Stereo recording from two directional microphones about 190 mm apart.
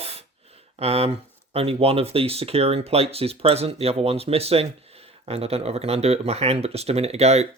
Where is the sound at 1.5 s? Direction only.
30° right (ahead or behind).